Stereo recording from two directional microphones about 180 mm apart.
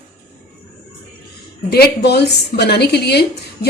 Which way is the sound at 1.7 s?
65° left (ahead or behind).